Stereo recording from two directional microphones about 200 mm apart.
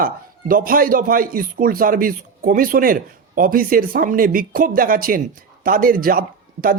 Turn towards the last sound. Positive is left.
turn(degrees=-45)  # may be behind; listen again after turning